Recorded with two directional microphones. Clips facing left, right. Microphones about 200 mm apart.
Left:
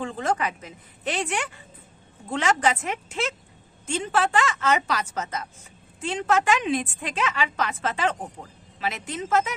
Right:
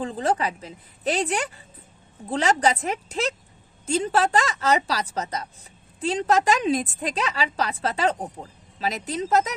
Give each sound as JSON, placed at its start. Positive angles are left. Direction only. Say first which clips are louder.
{"t": 0.0, "sound": "a woman's voice", "louder": "right 2 dB", "side_deg": -35}